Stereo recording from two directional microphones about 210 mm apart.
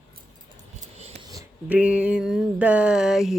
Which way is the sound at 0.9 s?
30° right (ahead or behind).